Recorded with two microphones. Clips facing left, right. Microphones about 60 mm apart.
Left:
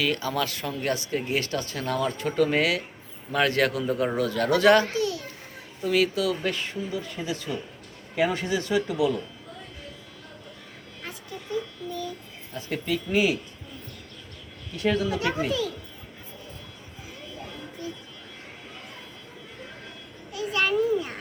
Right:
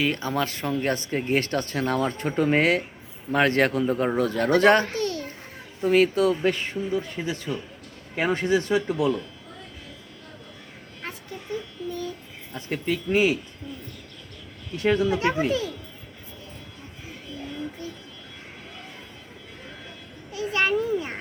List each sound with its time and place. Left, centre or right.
0.0 s speech: right
12.5 s speech: right
14.8 s speech: right
20.3 s children playing: right